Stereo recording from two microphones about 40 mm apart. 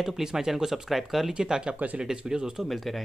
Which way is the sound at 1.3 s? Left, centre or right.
Centre.